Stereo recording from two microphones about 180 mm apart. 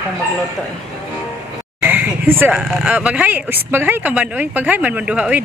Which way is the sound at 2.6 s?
5° right (ahead or behind).